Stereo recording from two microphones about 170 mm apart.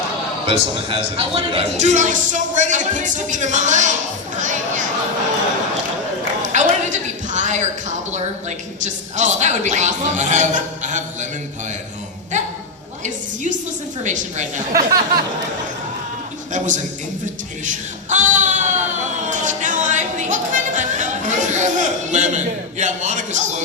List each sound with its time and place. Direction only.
0.4 s a man's voice: 30° right (ahead or behind)
6.4 s a sound: 45° right (ahead or behind)
8.1 s a man's voice: 45° right (ahead or behind)
14.0 s a man's voice: 45° right (ahead or behind)
16.5 s a man's voice: 45° right (ahead or behind)
17.7 s a sound: 45° right (ahead or behind)